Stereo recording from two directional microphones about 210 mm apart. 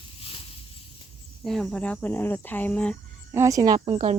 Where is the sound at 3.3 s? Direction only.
15° right (ahead or behind).